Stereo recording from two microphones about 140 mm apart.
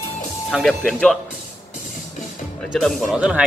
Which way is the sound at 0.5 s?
Centre (ahead or behind).